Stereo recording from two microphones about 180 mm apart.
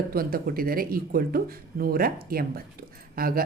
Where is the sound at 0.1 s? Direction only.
55° right (ahead or behind).